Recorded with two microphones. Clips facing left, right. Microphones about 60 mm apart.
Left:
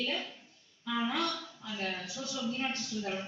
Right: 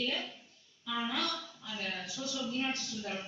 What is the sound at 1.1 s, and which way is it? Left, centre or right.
A man's voice, left.